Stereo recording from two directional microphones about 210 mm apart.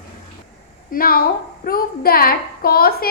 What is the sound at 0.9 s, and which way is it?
A woman's voice, 45° left (ahead or behind).